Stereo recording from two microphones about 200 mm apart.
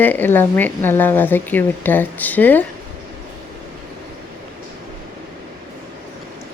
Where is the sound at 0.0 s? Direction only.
10° left (ahead or behind).